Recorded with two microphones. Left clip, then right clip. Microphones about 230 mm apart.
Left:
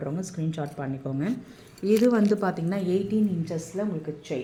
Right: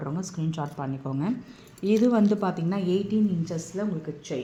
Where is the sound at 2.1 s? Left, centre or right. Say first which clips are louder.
Left 1 dB; centre.